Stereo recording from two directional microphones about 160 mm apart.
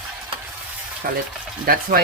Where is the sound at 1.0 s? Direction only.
65° right (ahead or behind).